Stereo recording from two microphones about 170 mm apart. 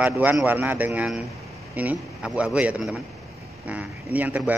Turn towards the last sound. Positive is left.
turn(degrees=-10)  # may be behind; listen again after turning